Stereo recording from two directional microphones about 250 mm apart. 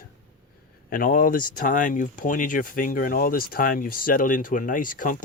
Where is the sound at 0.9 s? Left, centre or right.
Left.